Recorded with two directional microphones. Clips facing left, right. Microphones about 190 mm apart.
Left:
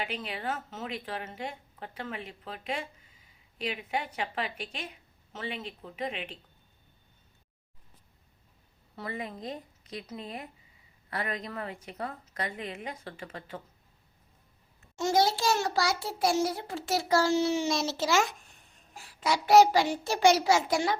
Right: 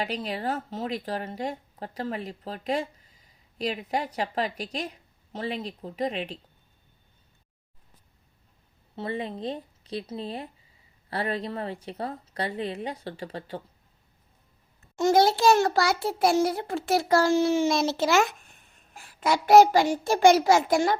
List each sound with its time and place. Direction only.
0.0 s a woman's voice: 40° right (ahead or behind)
9.0 s a woman's voice: 30° right (ahead or behind)
14.9 s a child's voice: 55° right (ahead or behind)